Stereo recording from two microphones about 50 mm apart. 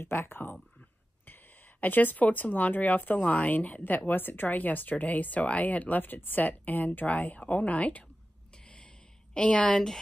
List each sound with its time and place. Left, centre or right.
0.0 s speech: left
1.8 s speech: left
9.3 s a woman's voice: centre